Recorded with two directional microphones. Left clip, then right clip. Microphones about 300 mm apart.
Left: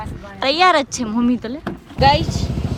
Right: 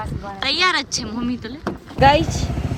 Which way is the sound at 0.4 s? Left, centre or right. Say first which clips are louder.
Left 5 dB; centre.